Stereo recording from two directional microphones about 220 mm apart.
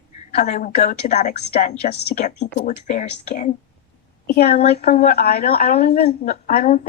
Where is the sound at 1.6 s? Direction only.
45° left (ahead or behind).